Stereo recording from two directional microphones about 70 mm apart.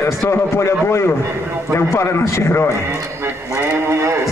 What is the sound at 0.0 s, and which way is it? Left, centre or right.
A man's voice, left.